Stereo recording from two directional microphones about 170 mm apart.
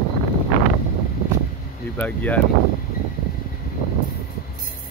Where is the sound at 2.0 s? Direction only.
10° left (ahead or behind).